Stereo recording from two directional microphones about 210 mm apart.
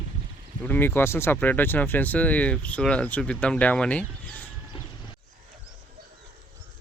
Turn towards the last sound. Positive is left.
turn(degrees=25)  # may be behind; listen again after turning